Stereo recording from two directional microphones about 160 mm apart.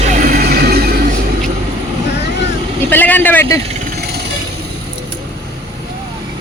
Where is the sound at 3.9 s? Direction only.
85° right.